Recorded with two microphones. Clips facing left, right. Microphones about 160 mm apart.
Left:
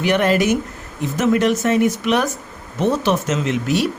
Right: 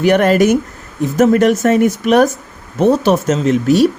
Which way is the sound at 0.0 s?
45° right (ahead or behind).